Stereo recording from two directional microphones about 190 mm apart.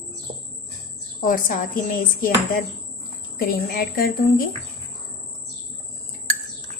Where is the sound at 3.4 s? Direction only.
50° left (ahead or behind).